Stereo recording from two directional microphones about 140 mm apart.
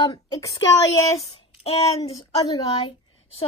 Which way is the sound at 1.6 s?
45° left (ahead or behind).